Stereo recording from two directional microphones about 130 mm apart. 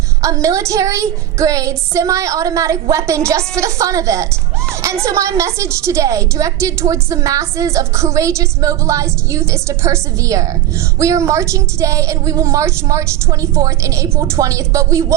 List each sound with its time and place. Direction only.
0.2 s a woman's voice: 25° right (ahead or behind)